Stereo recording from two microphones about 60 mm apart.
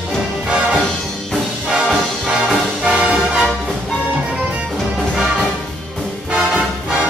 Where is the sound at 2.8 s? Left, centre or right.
Centre.